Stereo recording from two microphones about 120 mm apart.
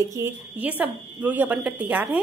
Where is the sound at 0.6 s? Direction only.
15° right (ahead or behind).